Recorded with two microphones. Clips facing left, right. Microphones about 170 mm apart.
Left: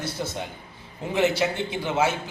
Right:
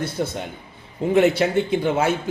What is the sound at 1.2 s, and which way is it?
Speech, 55° right (ahead or behind).